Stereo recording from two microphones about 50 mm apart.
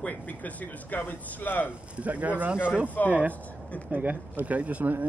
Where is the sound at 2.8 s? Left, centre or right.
Left.